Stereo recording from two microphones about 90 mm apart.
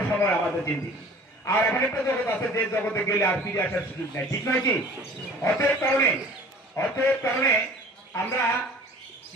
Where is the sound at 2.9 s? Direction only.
25° left (ahead or behind).